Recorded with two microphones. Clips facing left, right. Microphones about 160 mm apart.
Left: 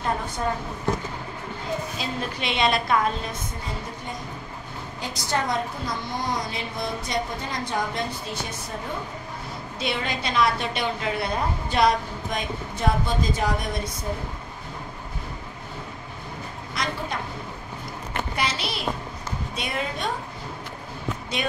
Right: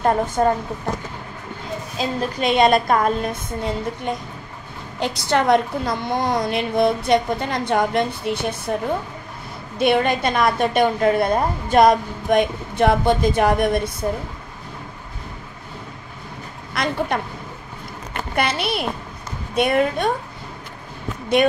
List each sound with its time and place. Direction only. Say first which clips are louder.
0.4 s a woman's voice: right 10 dB; 55° right (ahead or behind)
2.0 s a woman's voice: right 7 dB; 45° right (ahead or behind); by 8.7 s 65° right (ahead or behind)
9.8 s a woman's voice: right 11 dB; 55° right (ahead or behind)
16.7 s a woman's voice: right 8 dB; 60° right (ahead or behind)
18.3 s a woman's voice: right 9 dB; 60° right (ahead or behind)
21.4 s a woman's voice: right 12 dB; 60° right (ahead or behind)